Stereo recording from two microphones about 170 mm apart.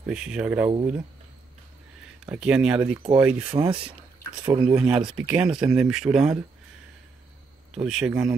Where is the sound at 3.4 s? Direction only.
20° right (ahead or behind).